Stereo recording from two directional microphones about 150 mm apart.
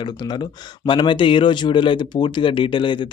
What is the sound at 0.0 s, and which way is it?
Speech, 30° left (ahead or behind).